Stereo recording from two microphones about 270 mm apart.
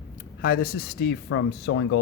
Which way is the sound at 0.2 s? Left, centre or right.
Left.